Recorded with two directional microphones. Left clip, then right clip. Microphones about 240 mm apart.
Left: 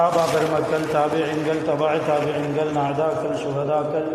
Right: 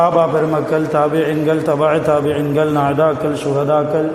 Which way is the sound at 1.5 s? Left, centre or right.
Right.